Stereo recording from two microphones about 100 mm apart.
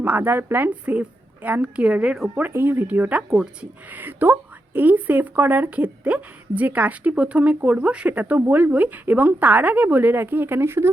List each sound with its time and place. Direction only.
0.0 s speech: 20° right (ahead or behind)